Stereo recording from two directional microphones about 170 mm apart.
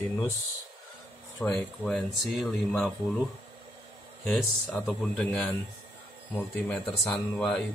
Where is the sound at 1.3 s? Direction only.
10° left (ahead or behind).